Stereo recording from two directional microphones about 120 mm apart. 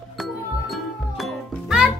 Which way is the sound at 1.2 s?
5° right (ahead or behind).